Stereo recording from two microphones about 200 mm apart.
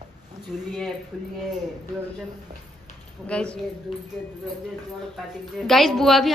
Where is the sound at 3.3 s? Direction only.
5° left (ahead or behind).